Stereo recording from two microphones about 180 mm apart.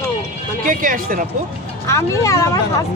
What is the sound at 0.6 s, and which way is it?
Speech, 50° right (ahead or behind).